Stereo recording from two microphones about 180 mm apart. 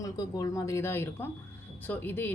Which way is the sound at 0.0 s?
20° left (ahead or behind).